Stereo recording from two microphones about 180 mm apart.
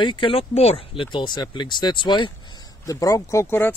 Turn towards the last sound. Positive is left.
turn(degrees=15)  # may be behind; listen again after turning